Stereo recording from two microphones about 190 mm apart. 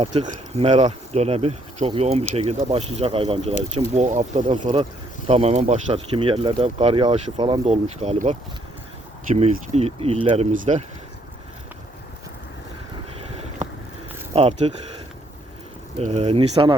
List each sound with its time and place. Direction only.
0.0 s speech: 25° right (ahead or behind)
4.6 s speech: 30° right (ahead or behind)
14.3 s speech: 30° right (ahead or behind)
16.0 s speech: 30° right (ahead or behind)